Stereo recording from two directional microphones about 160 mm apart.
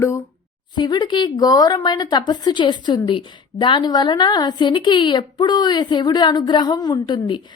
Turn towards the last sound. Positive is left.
turn(degrees=30)  # may be behind; listen again after turning